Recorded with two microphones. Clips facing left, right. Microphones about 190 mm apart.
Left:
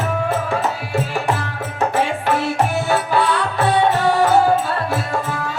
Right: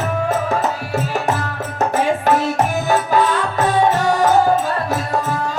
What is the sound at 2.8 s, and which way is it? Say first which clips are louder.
Music: right 2 dB; 40° right (ahead or behind).